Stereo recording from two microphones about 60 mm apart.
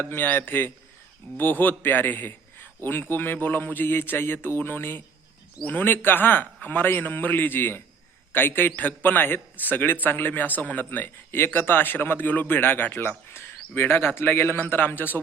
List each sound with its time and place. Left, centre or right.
0.0 s a man's voice: left